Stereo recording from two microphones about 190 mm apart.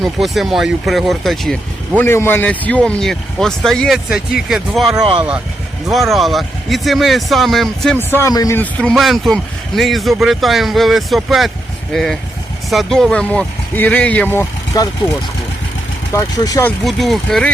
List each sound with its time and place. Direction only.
0.0 s speech: centre (ahead or behind)
16.1 s speech: 20° left (ahead or behind)
16.8 s speech: centre (ahead or behind)